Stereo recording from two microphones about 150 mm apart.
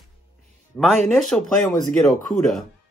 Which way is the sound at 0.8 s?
Centre (ahead or behind).